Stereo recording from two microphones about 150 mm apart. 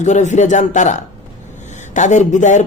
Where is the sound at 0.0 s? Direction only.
50° left (ahead or behind).